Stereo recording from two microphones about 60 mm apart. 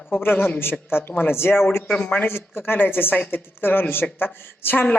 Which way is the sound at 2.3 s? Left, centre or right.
Left.